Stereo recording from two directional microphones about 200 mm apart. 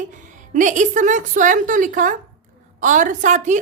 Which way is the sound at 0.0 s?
40° right (ahead or behind).